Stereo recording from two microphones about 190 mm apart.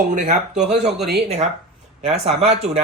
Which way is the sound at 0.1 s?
40° right (ahead or behind).